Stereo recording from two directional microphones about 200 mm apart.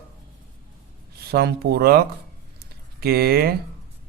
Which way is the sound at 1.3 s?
55° right (ahead or behind).